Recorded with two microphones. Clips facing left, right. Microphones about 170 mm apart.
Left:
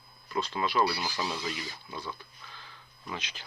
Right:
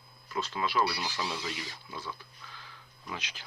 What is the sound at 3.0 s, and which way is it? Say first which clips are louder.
Speech: left 2 dB; 10° right (ahead or behind).